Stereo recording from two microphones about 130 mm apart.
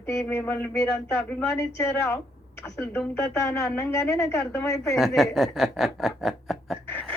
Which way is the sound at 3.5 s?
25° left (ahead or behind).